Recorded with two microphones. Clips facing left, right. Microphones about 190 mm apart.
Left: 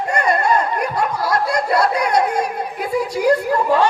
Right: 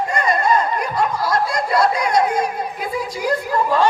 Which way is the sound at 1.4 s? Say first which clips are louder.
Left 1 dB; 65° left (ahead or behind).